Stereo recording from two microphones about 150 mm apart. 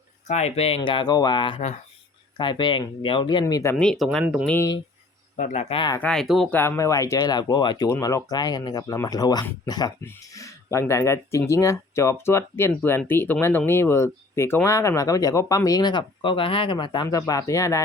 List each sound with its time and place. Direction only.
0.3 s speech: 50° left (ahead or behind)
0.8 s speech: 30° left (ahead or behind)
3.4 s speech: 20° left (ahead or behind)
3.8 s speech: centre (ahead or behind)
5.4 s speech: 50° left (ahead or behind)
6.0 s speech: 5° left (ahead or behind)
6.5 s speech: 15° left (ahead or behind)